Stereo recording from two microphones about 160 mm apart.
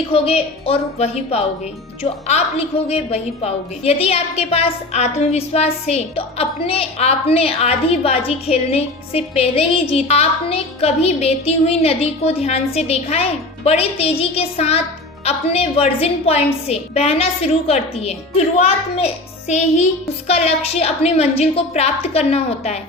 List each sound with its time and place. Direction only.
0.1 s a woman's voice: 35° left (ahead or behind)